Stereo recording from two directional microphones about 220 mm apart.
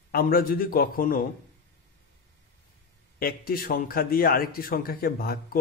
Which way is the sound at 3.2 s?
40° left (ahead or behind).